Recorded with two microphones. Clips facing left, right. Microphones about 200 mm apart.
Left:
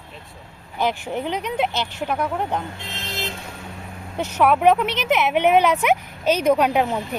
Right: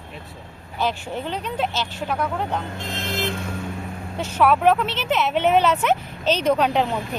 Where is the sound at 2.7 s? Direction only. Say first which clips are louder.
Right 5 dB; 50° right (ahead or behind).